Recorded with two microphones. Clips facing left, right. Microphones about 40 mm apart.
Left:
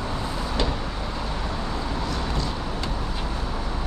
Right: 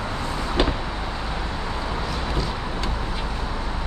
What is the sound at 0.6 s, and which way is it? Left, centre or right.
Vehicle, right.